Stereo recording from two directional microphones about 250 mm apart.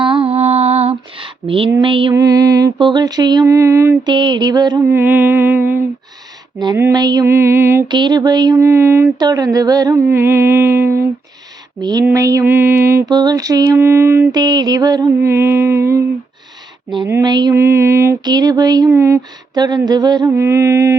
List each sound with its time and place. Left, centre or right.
0.0 s female singing: right
1.7 s mantra: centre